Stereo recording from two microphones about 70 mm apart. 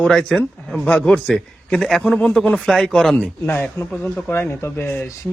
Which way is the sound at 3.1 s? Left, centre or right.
Left.